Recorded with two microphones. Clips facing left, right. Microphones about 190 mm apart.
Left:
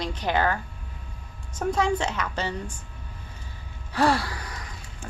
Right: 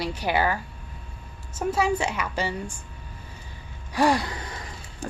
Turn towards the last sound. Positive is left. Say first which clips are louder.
# right 1 dB
turn(degrees=-25)  # may be behind; listen again after turning